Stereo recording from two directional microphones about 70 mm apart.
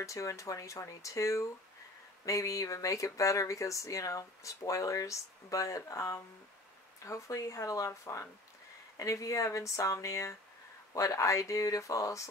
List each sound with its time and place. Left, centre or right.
0.0 s speech: left